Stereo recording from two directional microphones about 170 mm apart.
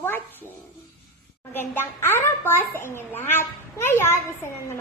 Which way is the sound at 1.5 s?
10° left (ahead or behind).